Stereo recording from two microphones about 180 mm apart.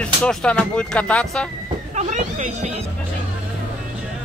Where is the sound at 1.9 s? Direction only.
40° right (ahead or behind).